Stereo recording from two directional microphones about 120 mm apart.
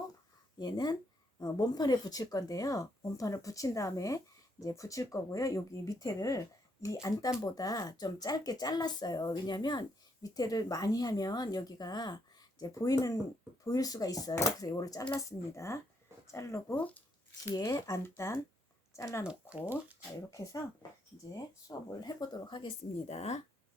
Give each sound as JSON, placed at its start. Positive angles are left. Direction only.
{"t": 0.6, "sound": "speech", "side_deg": 35}
{"t": 16.7, "sound": "speech", "side_deg": 10}
{"t": 17.5, "sound": "speech", "side_deg": 35}
{"t": 19.2, "sound": "speech", "side_deg": -10}
{"t": 20.3, "sound": "speech", "side_deg": 25}
{"t": 23.0, "sound": "speech", "side_deg": 65}